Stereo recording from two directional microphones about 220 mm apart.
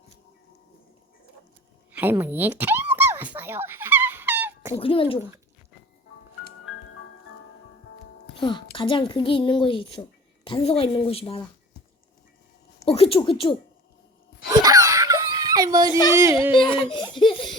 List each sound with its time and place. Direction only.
1.9 s a sound: 10° right (ahead or behind)
4.7 s a woman's voice: 25° left (ahead or behind)
8.4 s a woman's voice: 20° left (ahead or behind)
12.8 s a woman's voice: 25° left (ahead or behind)
14.4 s wail: 15° right (ahead or behind)
15.9 s a woman's voice: 20° left (ahead or behind)
16.1 s speech: 15° right (ahead or behind)
16.5 s speech: 20° left (ahead or behind)